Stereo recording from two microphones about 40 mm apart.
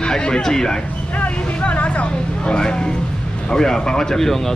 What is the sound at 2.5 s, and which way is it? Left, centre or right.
Speech, centre.